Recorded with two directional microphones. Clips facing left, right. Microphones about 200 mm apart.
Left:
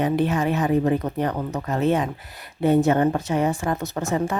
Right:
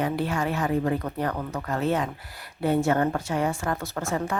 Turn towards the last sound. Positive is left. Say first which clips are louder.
# left 4 dB
turn(degrees=20)  # may be behind; listen again after turning